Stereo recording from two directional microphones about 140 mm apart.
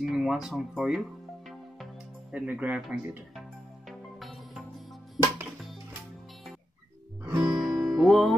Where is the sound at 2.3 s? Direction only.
10° right (ahead or behind).